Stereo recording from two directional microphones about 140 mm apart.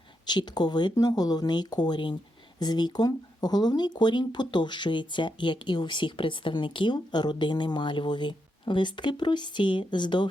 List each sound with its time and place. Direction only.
0.3 s speech: 30° left (ahead or behind)